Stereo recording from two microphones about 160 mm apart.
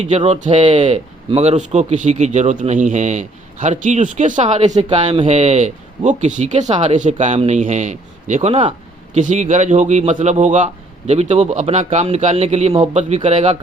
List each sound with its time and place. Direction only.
0.3 s a man's voice: 50° right (ahead or behind)